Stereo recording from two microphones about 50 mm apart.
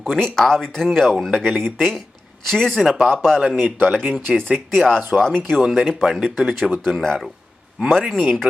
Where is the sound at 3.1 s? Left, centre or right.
Centre.